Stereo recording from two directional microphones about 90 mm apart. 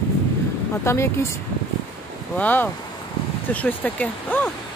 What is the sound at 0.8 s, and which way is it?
Speech, 30° left (ahead or behind).